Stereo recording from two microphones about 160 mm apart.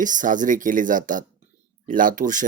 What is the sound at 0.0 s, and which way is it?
Speech, 55° right (ahead or behind).